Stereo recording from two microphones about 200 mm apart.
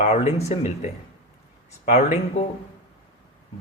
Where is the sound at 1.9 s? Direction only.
35° left (ahead or behind).